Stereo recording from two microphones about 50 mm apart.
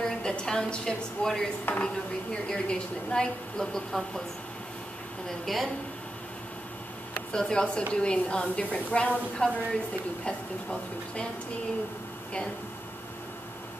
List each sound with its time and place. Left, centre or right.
0.0 s a woman's voice: centre
1.7 s speech: left
2.4 s speech: centre
5.4 s speech: centre
7.3 s a woman's voice: centre